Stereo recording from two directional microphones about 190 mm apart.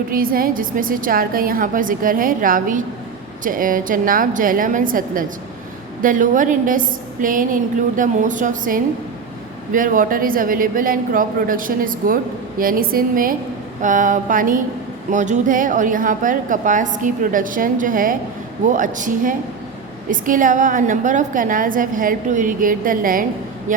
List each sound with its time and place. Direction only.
0.1 s a man's voice: 50° right (ahead or behind)